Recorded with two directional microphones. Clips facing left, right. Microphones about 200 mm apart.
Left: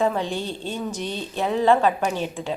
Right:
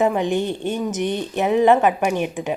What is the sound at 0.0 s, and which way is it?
A woman's voice, 20° right (ahead or behind).